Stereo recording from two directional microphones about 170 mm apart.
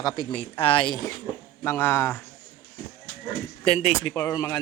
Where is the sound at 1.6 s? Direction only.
15° left (ahead or behind).